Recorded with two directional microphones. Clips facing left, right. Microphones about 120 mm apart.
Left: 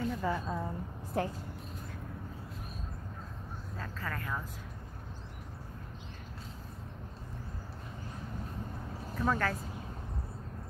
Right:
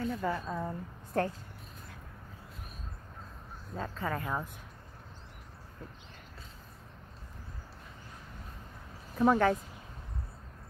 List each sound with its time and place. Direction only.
0.0 s a woman's voice: centre (ahead or behind)
3.7 s speech: 20° right (ahead or behind)
9.2 s speech: 20° right (ahead or behind)